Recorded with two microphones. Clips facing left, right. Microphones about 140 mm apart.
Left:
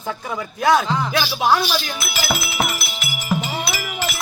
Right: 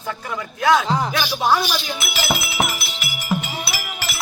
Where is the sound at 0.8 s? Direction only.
35° right (ahead or behind).